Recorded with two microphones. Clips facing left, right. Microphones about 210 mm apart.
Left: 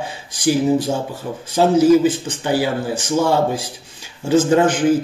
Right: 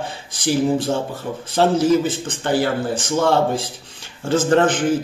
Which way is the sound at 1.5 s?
10° left (ahead or behind).